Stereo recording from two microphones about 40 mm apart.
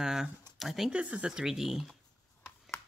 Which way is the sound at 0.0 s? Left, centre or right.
Centre.